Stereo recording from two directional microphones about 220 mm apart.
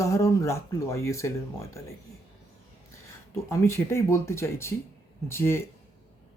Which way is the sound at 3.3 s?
10° left (ahead or behind).